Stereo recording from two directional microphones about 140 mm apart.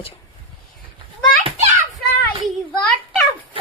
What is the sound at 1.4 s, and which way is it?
Children playing, 50° right (ahead or behind).